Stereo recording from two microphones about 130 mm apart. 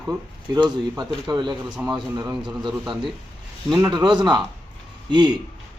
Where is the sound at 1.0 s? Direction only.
35° right (ahead or behind).